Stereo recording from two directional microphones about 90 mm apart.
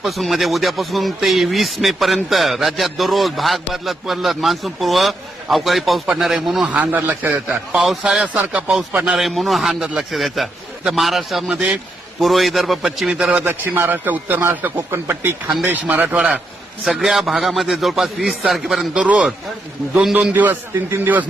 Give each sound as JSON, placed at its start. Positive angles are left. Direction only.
{"t": 0.0, "sound": "speech", "side_deg": 0}
{"t": 6.7, "sound": "speech", "side_deg": -15}
{"t": 7.7, "sound": "speech", "side_deg": -5}
{"t": 9.0, "sound": "speech", "side_deg": 0}
{"t": 12.2, "sound": "speech", "side_deg": 0}
{"t": 13.4, "sound": "a man's voice", "side_deg": -25}
{"t": 17.0, "sound": "speech", "side_deg": -5}
{"t": 18.9, "sound": "speech", "side_deg": -10}
{"t": 20.3, "sound": "a man's voice", "side_deg": -20}